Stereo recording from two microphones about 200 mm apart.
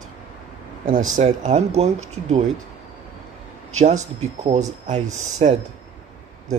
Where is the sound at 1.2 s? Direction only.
35° right (ahead or behind).